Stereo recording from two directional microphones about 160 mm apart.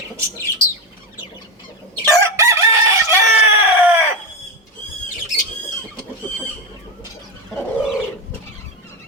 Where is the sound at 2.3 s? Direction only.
20° right (ahead or behind).